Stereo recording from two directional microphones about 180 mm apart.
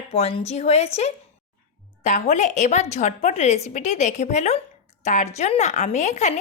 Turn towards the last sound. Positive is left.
turn(degrees=40)  # may be behind; listen again after turning